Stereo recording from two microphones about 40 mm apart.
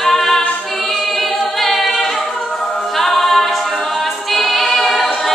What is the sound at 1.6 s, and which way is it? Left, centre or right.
A capella, centre.